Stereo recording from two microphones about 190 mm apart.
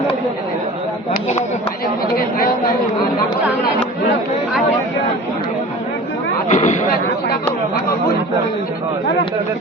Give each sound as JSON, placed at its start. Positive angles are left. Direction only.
{"t": 1.1, "sound": "speech", "side_deg": 40}
{"t": 2.1, "sound": "a woman's voice", "side_deg": 50}
{"t": 6.5, "sound": "a sound", "side_deg": 35}